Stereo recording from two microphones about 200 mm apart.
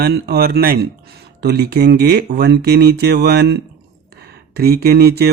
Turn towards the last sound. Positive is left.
turn(degrees=-50)  # may be behind; listen again after turning